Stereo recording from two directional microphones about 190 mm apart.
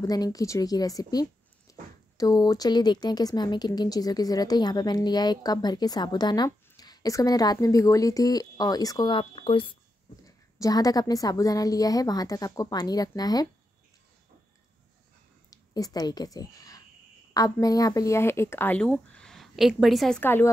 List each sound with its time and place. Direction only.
0.0 s speech: 20° left (ahead or behind)
15.5 s a woman's voice: 20° left (ahead or behind)